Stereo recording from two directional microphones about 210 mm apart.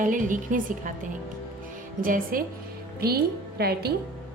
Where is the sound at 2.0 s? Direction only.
40° right (ahead or behind).